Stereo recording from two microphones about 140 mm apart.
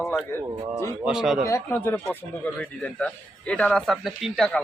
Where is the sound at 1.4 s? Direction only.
20° left (ahead or behind); by 4.6 s 5° left (ahead or behind).